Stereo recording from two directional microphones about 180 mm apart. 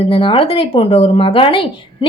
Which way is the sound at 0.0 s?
30° left (ahead or behind).